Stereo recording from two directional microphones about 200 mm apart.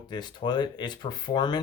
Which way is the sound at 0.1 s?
20° left (ahead or behind).